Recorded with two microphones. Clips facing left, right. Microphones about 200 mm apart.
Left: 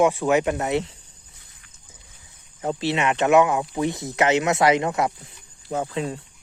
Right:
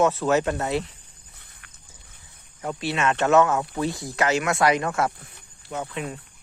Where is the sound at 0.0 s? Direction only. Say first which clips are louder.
Left 2 dB; 15° left (ahead or behind).